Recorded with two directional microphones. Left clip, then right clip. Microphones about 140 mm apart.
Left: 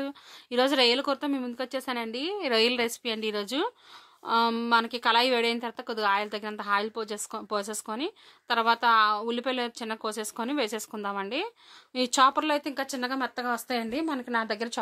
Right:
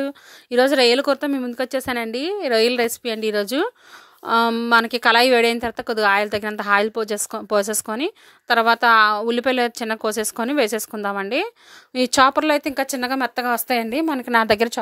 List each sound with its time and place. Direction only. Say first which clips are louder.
0.0 s a woman's voice: right 9 dB; 35° right (ahead or behind)
2.3 s a woman's voice: right 7 dB; 30° right (ahead or behind); by 14.7 s 70° right (ahead or behind)